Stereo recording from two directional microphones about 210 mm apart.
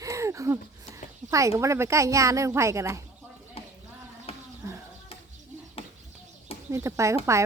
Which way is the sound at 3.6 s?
25° left (ahead or behind).